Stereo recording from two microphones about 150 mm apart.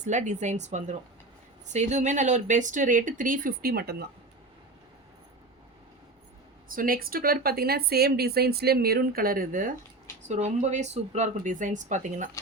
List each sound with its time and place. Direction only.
0.0 s speech: 55° right (ahead or behind); by 4.0 s 90° right
6.7 s a woman's voice: 70° right (ahead or behind)
10.2 s speech: 50° right (ahead or behind)